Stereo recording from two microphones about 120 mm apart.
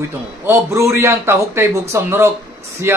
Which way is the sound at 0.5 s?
20° right (ahead or behind).